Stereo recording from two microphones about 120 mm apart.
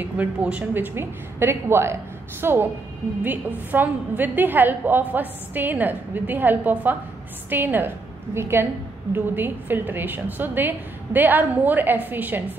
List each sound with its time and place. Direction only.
0.0 s a woman's voice: 15° right (ahead or behind)